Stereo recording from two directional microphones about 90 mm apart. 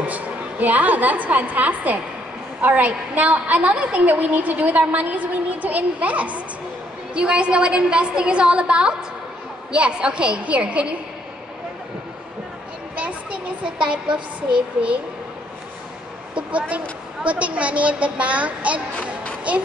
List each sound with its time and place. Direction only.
0.0 s a woman's voice: 15° right (ahead or behind)
12.9 s speech: 15° right (ahead or behind)
16.3 s a woman's voice: 15° right (ahead or behind)